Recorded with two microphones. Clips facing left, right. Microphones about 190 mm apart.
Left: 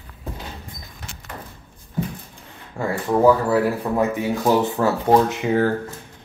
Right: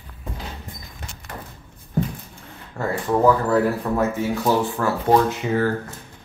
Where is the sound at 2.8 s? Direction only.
10° left (ahead or behind).